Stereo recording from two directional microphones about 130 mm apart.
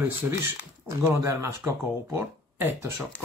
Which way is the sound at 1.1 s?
20° right (ahead or behind).